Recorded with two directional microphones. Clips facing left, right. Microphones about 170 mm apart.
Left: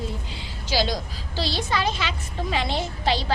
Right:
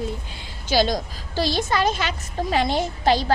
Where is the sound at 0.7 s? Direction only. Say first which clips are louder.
Right 4 dB; 50° right (ahead or behind).